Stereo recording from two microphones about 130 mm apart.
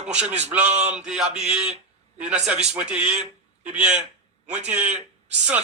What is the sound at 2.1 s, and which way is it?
Speech, 10° right (ahead or behind).